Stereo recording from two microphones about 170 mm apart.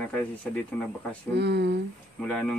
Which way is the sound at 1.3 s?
75° right (ahead or behind).